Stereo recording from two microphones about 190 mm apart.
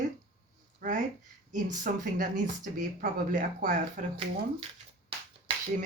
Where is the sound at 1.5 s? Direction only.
45° right (ahead or behind).